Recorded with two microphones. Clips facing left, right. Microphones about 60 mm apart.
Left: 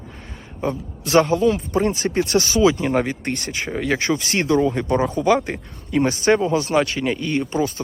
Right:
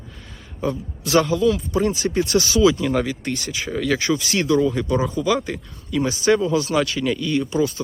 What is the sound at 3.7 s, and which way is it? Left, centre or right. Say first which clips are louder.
Speech: even; left.